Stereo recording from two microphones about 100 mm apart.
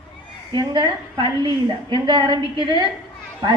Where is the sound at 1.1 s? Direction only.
55° right (ahead or behind).